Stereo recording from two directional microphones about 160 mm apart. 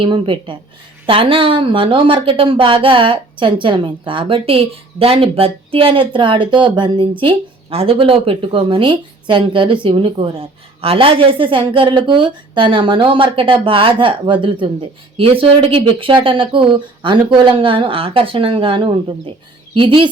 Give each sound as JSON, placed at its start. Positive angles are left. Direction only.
{"t": 0.0, "sound": "speech", "side_deg": -30}